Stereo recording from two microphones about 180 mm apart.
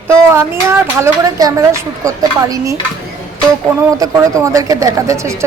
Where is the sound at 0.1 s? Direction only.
15° right (ahead or behind).